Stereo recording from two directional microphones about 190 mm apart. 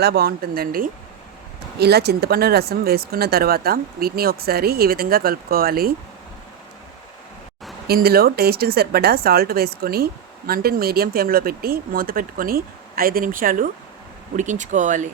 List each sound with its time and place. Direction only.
0.0 s a woman's voice: 55° right (ahead or behind)
7.9 s a woman's voice: 55° right (ahead or behind)